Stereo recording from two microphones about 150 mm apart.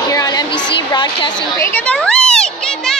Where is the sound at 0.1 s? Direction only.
25° left (ahead or behind).